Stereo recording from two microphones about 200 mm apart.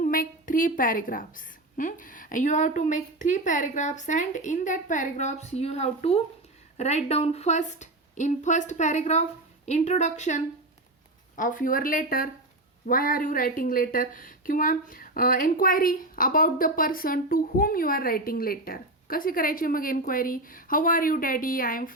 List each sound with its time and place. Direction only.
0.0 s a woman's voice: 40° left (ahead or behind)